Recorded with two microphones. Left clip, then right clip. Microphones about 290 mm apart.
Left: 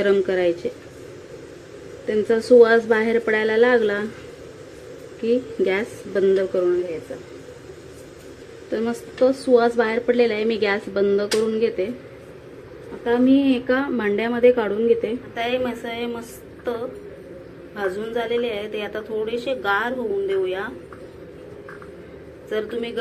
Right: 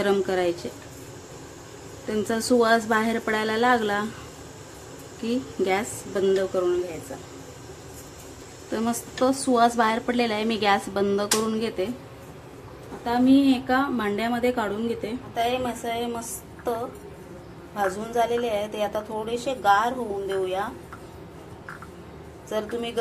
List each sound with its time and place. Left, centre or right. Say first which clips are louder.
0.0 s a woman's voice: left 4 dB; centre
2.0 s a woman's voice: left 7 dB; centre
5.2 s a woman's voice: left 6 dB; centre
8.7 s a woman's voice: left 4 dB; centre
13.3 s a woman's voice: right 2 dB; right
13.7 s a woman's voice: left 3 dB; centre
15.3 s a woman's voice: right 1 dB; centre
17.7 s a woman's voice: right 1 dB; right
22.5 s a woman's voice: left 3 dB; right